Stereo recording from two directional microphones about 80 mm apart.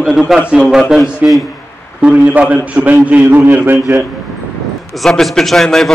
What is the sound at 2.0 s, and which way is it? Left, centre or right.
A man's voice, centre.